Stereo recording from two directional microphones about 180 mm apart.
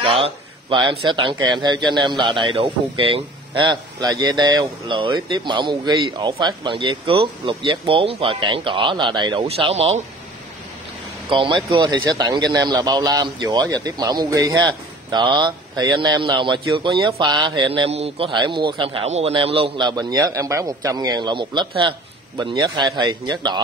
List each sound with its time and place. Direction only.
0.0 s speech: 30° right (ahead or behind)
11.2 s speech: 30° right (ahead or behind)